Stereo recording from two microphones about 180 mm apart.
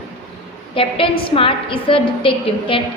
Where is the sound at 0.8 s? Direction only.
30° left (ahead or behind).